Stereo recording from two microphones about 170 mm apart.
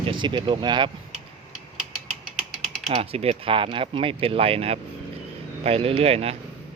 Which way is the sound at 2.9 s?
35° right (ahead or behind).